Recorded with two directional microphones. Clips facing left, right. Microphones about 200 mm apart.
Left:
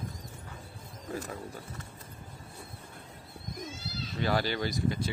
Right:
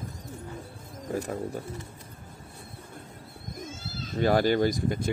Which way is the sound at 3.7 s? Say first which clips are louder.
Right 4 dB; 45° right (ahead or behind).